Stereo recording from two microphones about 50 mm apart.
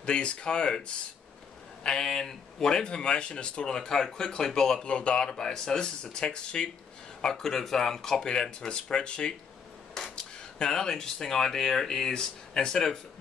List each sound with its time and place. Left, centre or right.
0.0 s speech: centre
4.7 s speech: left
7.4 s speech: centre
9.9 s a sound: centre
10.6 s speech: centre